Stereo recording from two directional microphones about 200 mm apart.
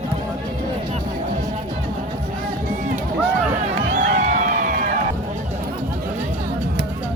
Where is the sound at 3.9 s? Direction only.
40° right (ahead or behind).